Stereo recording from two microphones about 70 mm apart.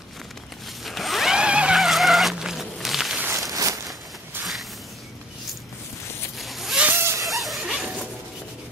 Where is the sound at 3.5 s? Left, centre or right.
Right.